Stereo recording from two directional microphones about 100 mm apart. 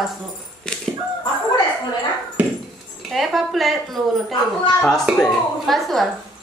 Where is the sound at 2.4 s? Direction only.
15° right (ahead or behind).